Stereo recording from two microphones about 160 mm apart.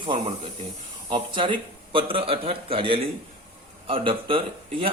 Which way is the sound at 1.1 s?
30° right (ahead or behind).